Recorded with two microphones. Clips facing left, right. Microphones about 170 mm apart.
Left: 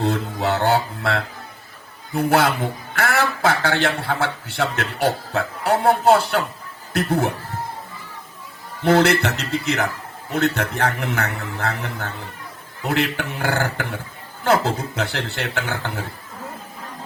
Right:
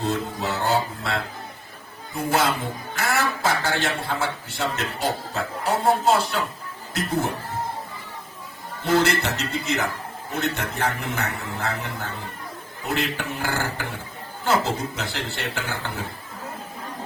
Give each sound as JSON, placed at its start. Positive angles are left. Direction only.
{"t": 0.0, "sound": "a man's voice", "side_deg": 65}
{"t": 8.8, "sound": "a man's voice", "side_deg": 65}